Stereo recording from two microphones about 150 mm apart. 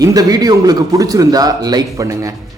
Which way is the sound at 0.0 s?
25° right (ahead or behind).